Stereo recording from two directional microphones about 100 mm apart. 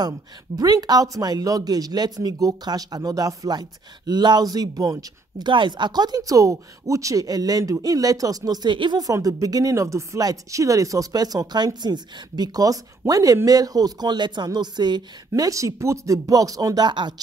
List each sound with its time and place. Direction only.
0.6 s speech: 40° right (ahead or behind)
5.5 s speech: 50° right (ahead or behind); by 8.5 s 35° right (ahead or behind)
8.6 s speech: 55° right (ahead or behind)
9.0 s speech: 35° right (ahead or behind)